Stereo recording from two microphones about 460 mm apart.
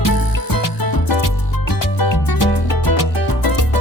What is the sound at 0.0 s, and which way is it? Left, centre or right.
Music, left.